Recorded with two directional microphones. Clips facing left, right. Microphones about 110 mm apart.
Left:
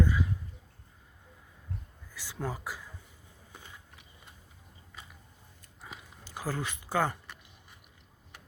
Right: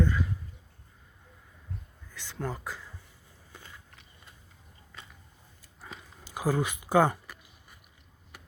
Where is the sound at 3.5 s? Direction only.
15° left (ahead or behind).